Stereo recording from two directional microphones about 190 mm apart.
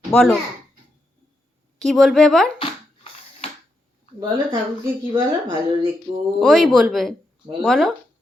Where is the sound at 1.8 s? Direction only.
Centre (ahead or behind).